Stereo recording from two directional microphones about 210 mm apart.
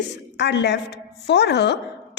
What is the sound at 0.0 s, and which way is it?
A woman's voice, 55° left (ahead or behind).